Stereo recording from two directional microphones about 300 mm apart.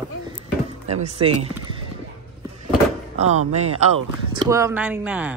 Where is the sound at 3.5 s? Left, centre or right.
Right.